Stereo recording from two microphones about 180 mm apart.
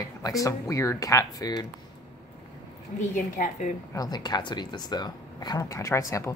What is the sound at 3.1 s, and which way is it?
Speech, 45° left (ahead or behind).